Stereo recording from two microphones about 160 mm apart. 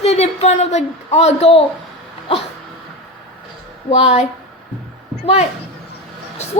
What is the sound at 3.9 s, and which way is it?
Speech, 45° left (ahead or behind).